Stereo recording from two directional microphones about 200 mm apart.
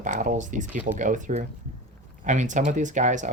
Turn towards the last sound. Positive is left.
turn(degrees=-40)  # may be behind; listen again after turning